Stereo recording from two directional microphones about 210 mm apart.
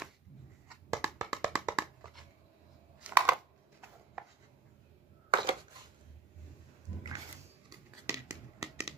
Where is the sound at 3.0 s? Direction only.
5° right (ahead or behind).